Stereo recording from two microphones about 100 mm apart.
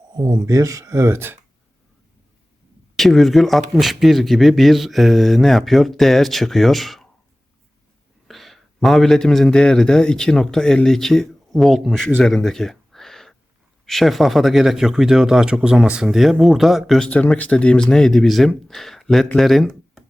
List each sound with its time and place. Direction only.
0.1 s speech: 45° right (ahead or behind); by 1.4 s 25° right (ahead or behind)
2.9 s speech: centre (ahead or behind)
8.3 s a man's voice: centre (ahead or behind)
12.2 s a sound: 5° left (ahead or behind)
13.8 s speech: centre (ahead or behind)
17.1 s speech: 15° left (ahead or behind)
19.4 s a sound: centre (ahead or behind)